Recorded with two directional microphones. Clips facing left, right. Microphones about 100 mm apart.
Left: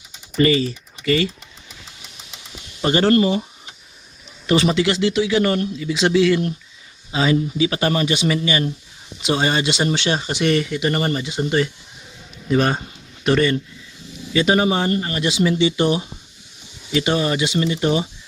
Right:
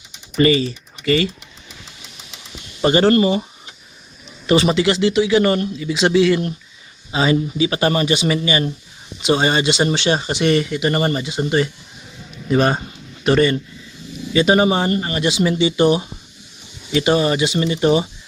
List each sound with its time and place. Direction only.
0.4 s speech: 65° right (ahead or behind)
2.8 s speech: 20° right (ahead or behind)
4.7 s speech: 35° right (ahead or behind)
5.1 s a man's voice: 5° right (ahead or behind)
7.1 s speech: 20° right (ahead or behind)
15.6 s speech: 25° right (ahead or behind)